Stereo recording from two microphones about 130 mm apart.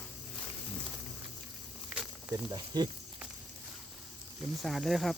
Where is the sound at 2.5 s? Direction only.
35° right (ahead or behind).